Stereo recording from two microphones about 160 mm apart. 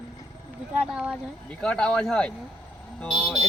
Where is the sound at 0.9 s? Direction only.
5° right (ahead or behind).